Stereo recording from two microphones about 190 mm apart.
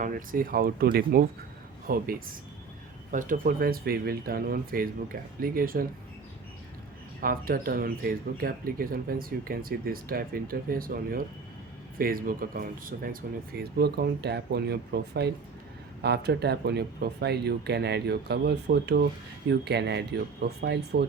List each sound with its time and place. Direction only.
0.0 s speech: 45° right (ahead or behind)
3.1 s speech: 45° right (ahead or behind)
7.2 s speech: 50° right (ahead or behind)